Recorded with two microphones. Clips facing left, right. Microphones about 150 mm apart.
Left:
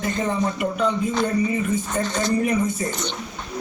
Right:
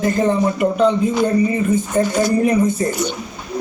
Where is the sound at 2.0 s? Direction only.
5° right (ahead or behind).